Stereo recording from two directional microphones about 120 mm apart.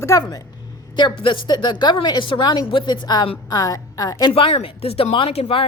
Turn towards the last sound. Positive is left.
turn(degrees=55)  # may be behind; listen again after turning